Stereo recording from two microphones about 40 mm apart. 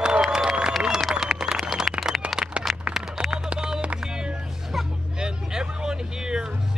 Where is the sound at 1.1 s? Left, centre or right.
Centre.